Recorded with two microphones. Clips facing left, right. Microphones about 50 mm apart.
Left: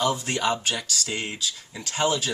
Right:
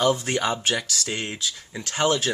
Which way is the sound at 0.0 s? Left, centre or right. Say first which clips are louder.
Right 2 dB; right.